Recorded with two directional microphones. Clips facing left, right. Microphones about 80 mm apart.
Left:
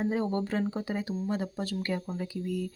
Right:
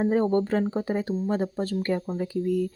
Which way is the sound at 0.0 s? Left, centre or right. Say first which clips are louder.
Right 7 dB; right.